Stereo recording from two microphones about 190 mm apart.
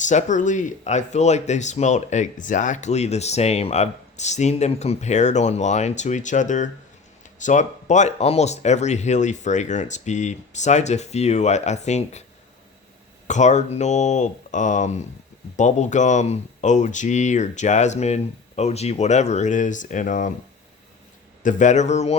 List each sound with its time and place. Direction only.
0.0 s speech: 40° left (ahead or behind)
13.2 s speech: 40° left (ahead or behind)
21.4 s speech: 40° left (ahead or behind)